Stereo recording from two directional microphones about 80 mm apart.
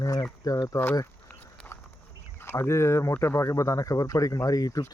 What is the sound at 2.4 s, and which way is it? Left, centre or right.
Speech, left.